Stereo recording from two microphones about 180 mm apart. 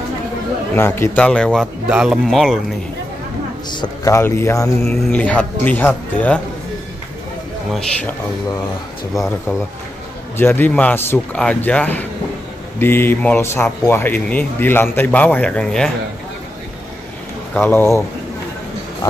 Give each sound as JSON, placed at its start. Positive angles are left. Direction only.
{"t": 0.7, "sound": "speech", "side_deg": 15}
{"t": 3.7, "sound": "speech", "side_deg": 20}
{"t": 7.7, "sound": "speech", "side_deg": 10}
{"t": 10.3, "sound": "speech", "side_deg": 10}
{"t": 17.6, "sound": "speech", "side_deg": 10}